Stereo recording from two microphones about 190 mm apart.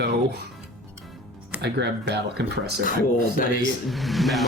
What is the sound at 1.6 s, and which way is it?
Speech, 60° right (ahead or behind).